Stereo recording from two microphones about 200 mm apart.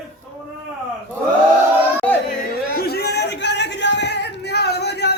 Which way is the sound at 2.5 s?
50° left (ahead or behind).